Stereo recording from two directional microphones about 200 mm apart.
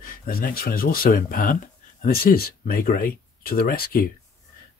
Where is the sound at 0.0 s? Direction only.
45° left (ahead or behind).